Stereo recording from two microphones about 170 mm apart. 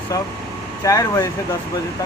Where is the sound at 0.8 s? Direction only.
20° left (ahead or behind).